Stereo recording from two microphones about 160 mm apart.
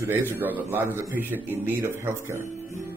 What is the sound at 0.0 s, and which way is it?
A man's voice, 10° right (ahead or behind).